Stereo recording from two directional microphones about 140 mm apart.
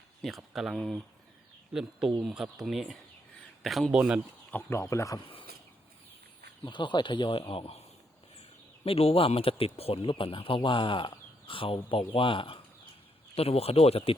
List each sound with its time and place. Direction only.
0.2 s speech: centre (ahead or behind)
4.5 s speech: 20° left (ahead or behind)
6.7 s speech: 35° left (ahead or behind)